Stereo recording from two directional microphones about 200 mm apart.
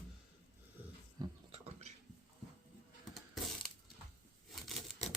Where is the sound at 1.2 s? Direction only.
30° right (ahead or behind).